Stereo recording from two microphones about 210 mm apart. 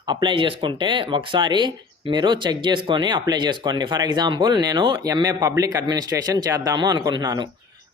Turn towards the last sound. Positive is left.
turn(degrees=-20)  # may be behind; listen again after turning